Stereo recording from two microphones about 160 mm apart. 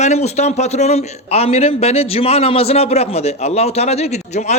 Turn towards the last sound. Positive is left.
turn(degrees=45)  # may be behind; listen again after turning